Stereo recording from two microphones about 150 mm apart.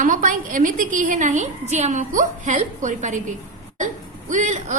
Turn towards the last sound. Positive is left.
turn(degrees=-55)  # may be behind; listen again after turning